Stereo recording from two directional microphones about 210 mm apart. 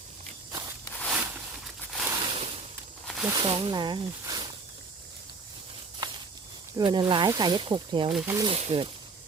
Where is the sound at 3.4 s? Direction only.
25° right (ahead or behind).